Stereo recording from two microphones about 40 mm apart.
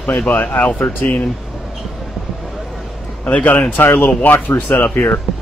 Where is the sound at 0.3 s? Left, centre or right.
Left.